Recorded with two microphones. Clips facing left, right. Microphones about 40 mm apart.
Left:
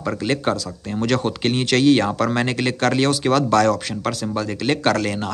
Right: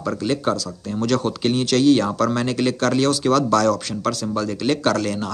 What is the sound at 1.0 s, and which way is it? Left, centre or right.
Speech, left.